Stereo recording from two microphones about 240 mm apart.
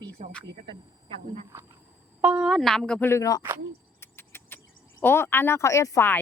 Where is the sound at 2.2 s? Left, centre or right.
Centre.